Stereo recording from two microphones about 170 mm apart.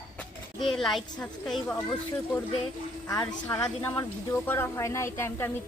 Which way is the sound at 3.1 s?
20° left (ahead or behind).